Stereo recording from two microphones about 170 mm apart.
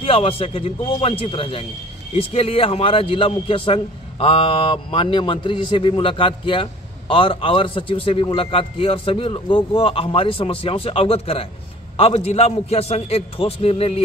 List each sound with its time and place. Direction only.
0.0 s a man's voice: 35° left (ahead or behind)